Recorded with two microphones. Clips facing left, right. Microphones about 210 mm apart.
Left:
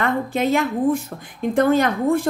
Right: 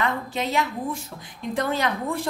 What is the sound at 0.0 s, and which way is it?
A woman's voice, 50° left (ahead or behind).